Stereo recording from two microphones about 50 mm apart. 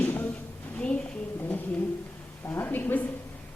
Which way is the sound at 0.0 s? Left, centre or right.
Left.